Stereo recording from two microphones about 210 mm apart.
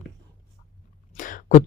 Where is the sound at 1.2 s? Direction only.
40° left (ahead or behind).